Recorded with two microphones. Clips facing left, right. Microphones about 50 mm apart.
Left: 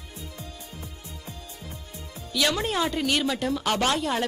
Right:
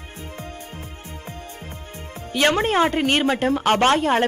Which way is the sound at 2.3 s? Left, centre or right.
Right.